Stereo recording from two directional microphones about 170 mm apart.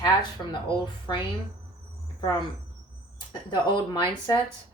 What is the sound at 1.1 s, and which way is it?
Speech, 25° left (ahead or behind).